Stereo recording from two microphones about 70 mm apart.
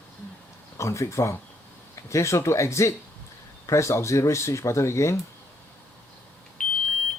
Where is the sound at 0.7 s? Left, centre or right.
Left.